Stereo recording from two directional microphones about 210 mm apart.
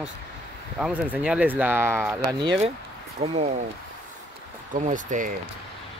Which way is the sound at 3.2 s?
30° right (ahead or behind).